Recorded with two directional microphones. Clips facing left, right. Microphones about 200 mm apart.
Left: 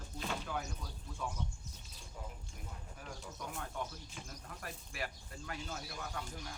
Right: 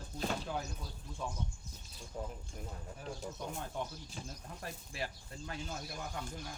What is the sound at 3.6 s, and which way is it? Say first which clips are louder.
Speech: right 2 dB; 25° right (ahead or behind).